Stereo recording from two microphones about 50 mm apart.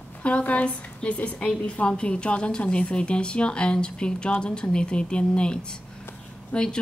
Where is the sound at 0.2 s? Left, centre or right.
Left.